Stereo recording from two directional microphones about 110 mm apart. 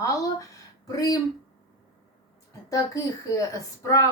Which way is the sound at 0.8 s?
30° left (ahead or behind).